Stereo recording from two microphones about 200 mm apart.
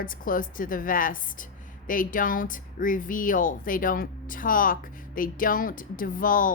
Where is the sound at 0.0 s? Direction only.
45° left (ahead or behind).